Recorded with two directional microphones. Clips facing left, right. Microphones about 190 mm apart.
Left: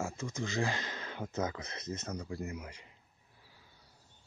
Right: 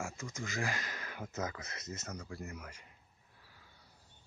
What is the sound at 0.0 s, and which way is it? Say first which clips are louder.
Speech: left 5 dB; 20° left (ahead or behind).